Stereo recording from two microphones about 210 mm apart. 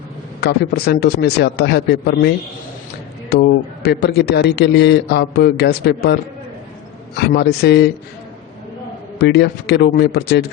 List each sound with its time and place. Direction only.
0.4 s a man's voice: 50° left (ahead or behind)
3.3 s a man's voice: 50° left (ahead or behind)
7.2 s a man's voice: 50° left (ahead or behind)
9.1 s a man's voice: 50° left (ahead or behind)